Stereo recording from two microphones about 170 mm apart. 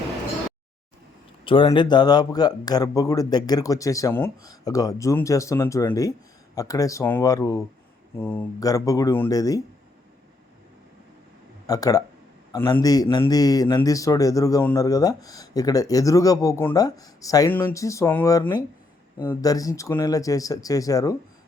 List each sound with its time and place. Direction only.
1.5 s speech: 30° left (ahead or behind)
11.6 s speech: 20° left (ahead or behind)